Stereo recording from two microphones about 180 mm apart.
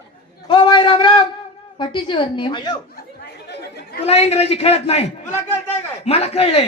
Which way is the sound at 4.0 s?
35° left (ahead or behind).